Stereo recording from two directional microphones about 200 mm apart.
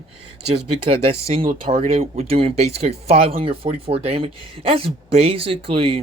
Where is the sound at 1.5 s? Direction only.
40° right (ahead or behind).